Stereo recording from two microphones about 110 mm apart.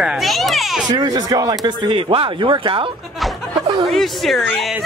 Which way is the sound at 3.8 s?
Centre (ahead or behind).